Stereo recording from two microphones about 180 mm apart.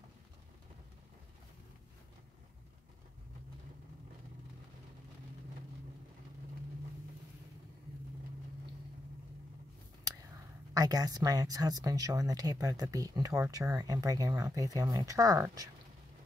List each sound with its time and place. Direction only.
10.7 s speech: 20° right (ahead or behind)